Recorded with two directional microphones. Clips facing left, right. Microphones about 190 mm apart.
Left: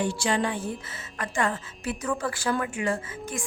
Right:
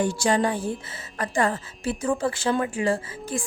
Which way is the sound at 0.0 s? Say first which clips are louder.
Right 4 dB; 45° right (ahead or behind).